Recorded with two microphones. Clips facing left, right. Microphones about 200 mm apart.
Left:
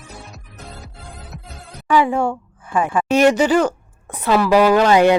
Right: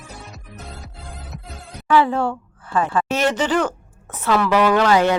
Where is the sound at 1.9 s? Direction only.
15° left (ahead or behind).